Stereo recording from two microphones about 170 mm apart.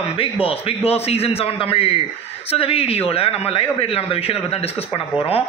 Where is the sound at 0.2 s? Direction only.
35° left (ahead or behind).